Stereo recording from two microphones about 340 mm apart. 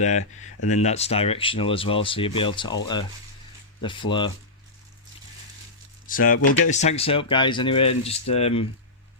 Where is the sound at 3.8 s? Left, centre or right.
Centre.